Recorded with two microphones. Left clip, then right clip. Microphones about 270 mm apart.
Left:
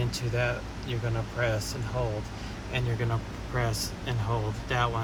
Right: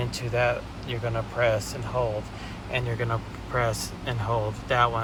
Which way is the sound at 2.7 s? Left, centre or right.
Centre.